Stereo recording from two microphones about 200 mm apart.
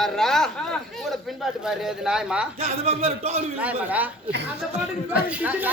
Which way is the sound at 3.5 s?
5° right (ahead or behind).